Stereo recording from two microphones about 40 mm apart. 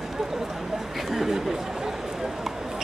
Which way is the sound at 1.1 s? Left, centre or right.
Centre.